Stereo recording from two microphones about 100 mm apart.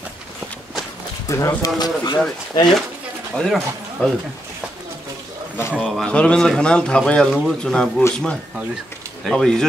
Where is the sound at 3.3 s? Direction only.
5° left (ahead or behind).